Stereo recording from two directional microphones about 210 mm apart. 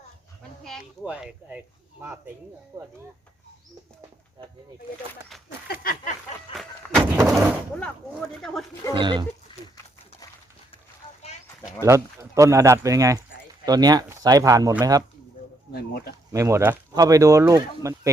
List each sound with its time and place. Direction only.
0.6 s speech: centre (ahead or behind)
5.6 s a sound: 45° left (ahead or behind)
6.5 s a sound: centre (ahead or behind)
7.8 s speech: centre (ahead or behind)
9.0 s speech: 20° right (ahead or behind)
11.9 s speech: 15° right (ahead or behind)
15.7 s speech: 50° left (ahead or behind)
16.3 s speech: 15° right (ahead or behind)